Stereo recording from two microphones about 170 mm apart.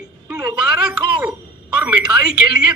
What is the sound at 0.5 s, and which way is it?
Speech, 5° right (ahead or behind).